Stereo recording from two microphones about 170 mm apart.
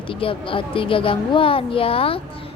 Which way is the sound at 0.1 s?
30° left (ahead or behind).